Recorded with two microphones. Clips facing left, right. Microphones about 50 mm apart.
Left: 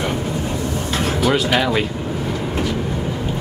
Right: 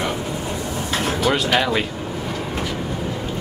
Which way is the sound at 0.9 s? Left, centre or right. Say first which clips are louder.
Left 2 dB; centre.